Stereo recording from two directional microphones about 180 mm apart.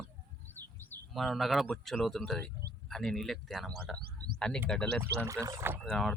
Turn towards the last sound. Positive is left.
turn(degrees=5)  # may be behind; listen again after turning